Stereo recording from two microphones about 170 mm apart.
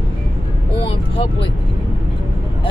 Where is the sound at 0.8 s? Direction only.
30° left (ahead or behind).